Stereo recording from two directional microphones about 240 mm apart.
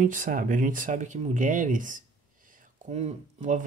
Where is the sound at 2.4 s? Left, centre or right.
Right.